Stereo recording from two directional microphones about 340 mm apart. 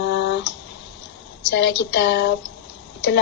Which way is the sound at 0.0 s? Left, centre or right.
Left.